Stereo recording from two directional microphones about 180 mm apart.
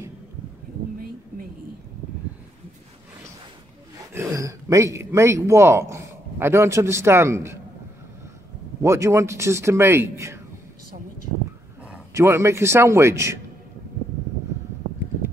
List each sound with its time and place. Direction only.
4.1 s speech: 15° right (ahead or behind)
8.8 s speech: 15° right (ahead or behind)
11.9 s speech: 15° right (ahead or behind)